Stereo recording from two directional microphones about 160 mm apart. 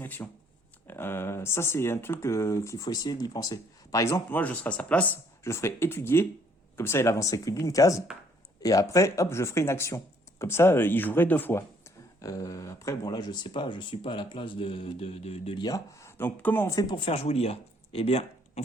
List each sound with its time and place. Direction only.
0.0 s speech: 15° left (ahead or behind); by 15.5 s 40° left (ahead or behind)
15.5 s speech: 25° left (ahead or behind)
17.1 s speech: 40° left (ahead or behind)